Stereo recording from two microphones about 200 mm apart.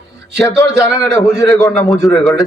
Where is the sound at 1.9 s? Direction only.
Centre (ahead or behind).